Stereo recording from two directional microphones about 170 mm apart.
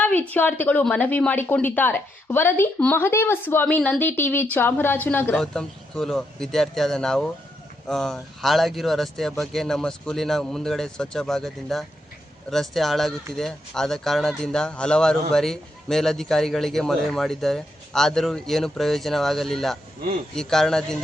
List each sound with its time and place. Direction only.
0.0 s speech: 10° left (ahead or behind)